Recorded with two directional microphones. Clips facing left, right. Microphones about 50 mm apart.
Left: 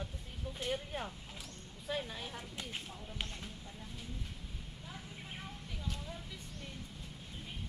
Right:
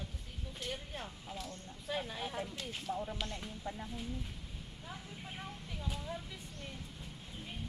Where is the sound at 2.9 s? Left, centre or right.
Right.